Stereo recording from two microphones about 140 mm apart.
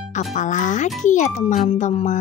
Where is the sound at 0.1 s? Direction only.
60° left (ahead or behind).